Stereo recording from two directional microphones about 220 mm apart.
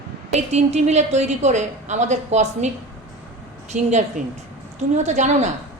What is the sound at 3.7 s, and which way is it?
A woman's voice, 30° right (ahead or behind).